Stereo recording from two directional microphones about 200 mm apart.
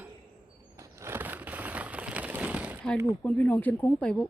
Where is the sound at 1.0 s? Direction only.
10° right (ahead or behind).